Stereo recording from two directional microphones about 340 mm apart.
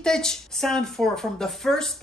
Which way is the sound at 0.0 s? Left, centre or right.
Centre.